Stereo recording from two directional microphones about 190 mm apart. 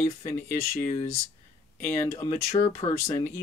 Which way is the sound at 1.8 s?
10° left (ahead or behind).